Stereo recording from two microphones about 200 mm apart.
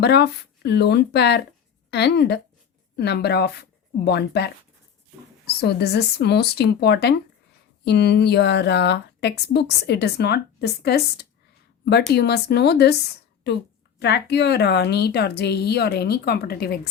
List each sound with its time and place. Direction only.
0.0 s a woman's voice: 55° left (ahead or behind)
5.5 s a woman's voice: 55° left (ahead or behind)